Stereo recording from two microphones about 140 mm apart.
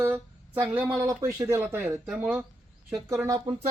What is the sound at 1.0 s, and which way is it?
Speech, 25° right (ahead or behind).